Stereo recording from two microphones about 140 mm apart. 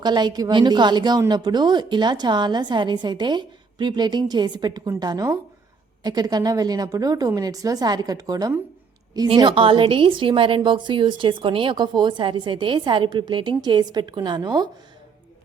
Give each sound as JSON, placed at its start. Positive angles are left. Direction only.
{"t": 0.0, "sound": "a woman's voice", "side_deg": -30}